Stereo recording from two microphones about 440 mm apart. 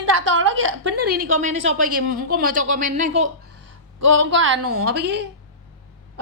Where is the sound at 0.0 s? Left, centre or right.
Right.